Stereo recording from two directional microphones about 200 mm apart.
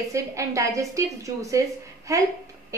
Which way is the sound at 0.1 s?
15° right (ahead or behind).